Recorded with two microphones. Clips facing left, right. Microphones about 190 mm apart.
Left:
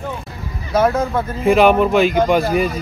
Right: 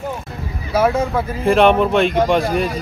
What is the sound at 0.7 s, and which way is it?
Speech, 10° right (ahead or behind).